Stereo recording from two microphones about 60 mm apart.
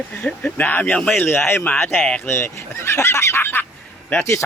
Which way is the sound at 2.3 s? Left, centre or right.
Left.